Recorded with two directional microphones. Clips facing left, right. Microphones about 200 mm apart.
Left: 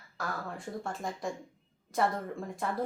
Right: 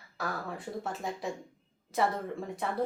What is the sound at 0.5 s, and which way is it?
Speech, 5° right (ahead or behind).